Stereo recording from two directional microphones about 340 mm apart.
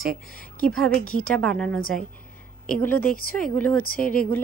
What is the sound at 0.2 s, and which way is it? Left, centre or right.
Speech, left.